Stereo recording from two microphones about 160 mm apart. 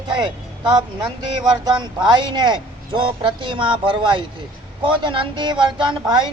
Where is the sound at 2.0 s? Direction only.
30° right (ahead or behind).